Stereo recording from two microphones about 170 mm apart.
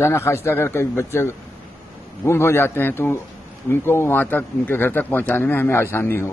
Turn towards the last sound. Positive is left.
turn(degrees=15)  # may be behind; listen again after turning